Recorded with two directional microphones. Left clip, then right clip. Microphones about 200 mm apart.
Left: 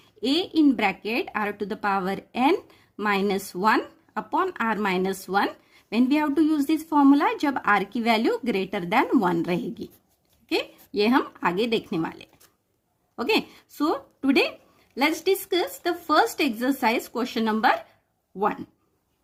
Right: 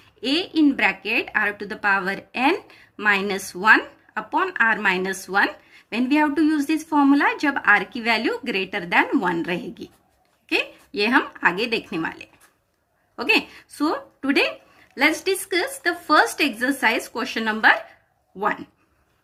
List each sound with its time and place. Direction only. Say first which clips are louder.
0.2 s a woman's voice: right 2 dB; 50° left (ahead or behind)